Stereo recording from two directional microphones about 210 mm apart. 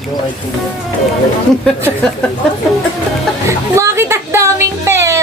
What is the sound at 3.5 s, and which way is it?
Music, 15° right (ahead or behind).